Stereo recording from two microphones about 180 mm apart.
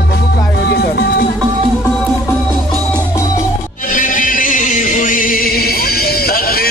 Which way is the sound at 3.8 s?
50° left (ahead or behind).